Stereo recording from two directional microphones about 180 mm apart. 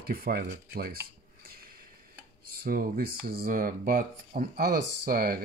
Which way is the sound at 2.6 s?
55° right (ahead or behind).